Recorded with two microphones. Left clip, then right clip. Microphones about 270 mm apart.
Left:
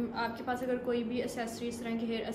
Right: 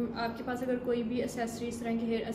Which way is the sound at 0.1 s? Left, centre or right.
Centre.